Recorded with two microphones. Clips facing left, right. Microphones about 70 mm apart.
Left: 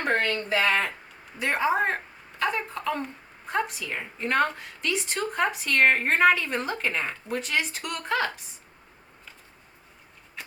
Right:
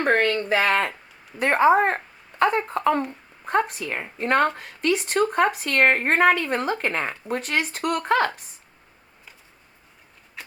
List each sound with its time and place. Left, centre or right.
0.4 s speech: right